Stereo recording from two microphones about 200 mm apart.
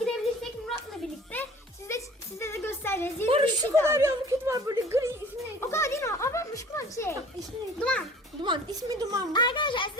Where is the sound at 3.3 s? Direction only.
30° right (ahead or behind).